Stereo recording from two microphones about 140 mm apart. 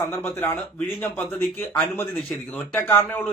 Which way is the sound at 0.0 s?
15° left (ahead or behind).